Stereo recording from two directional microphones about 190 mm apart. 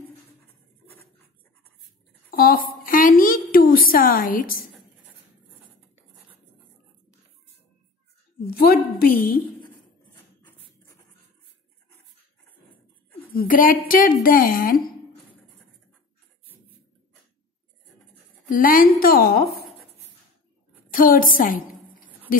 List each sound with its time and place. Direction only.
2.3 s a sound: 50° left (ahead or behind)
8.5 s a woman's voice: 50° left (ahead or behind)
13.3 s a woman's voice: 45° left (ahead or behind)
18.5 s a woman's voice: 45° left (ahead or behind)
20.9 s a woman's voice: 45° left (ahead or behind)
22.3 s a sound: 45° left (ahead or behind)